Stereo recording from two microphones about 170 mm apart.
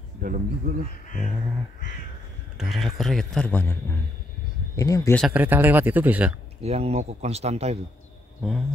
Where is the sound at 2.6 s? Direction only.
Centre (ahead or behind).